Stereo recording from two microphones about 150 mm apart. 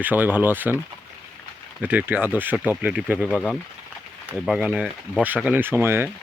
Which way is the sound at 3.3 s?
5° left (ahead or behind).